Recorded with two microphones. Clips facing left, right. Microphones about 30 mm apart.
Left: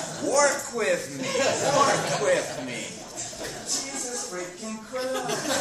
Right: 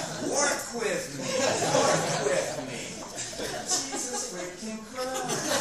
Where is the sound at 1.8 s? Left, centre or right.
Centre.